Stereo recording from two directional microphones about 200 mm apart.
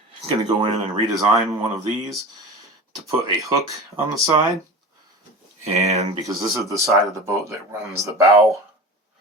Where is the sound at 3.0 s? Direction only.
15° right (ahead or behind).